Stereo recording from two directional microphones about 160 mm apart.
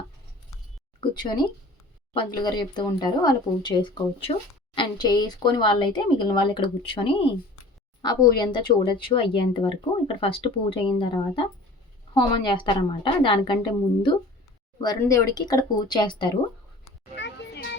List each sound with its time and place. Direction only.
1.0 s speech: 30° left (ahead or behind)
14.8 s speech: 25° left (ahead or behind)
17.2 s a sound: 90° left